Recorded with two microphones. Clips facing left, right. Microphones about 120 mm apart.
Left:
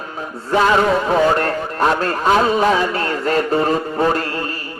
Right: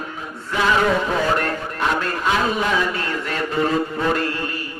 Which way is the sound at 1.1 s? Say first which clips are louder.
Left 5 dB; 35° left (ahead or behind).